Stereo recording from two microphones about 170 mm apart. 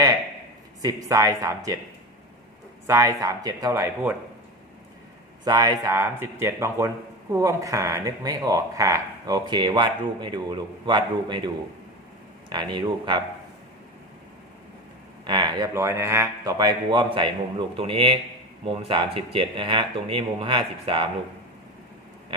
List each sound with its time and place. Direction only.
0.8 s speech: 20° right (ahead or behind)
2.8 s speech: 20° right (ahead or behind)
5.5 s speech: 25° right (ahead or behind)
15.3 s speech: 25° right (ahead or behind)